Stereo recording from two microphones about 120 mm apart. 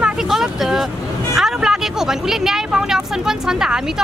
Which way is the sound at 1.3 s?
5° right (ahead or behind).